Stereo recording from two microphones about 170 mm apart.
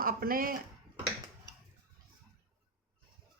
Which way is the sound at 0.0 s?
60° right (ahead or behind).